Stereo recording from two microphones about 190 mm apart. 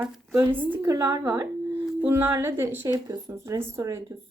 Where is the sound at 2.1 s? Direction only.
10° right (ahead or behind).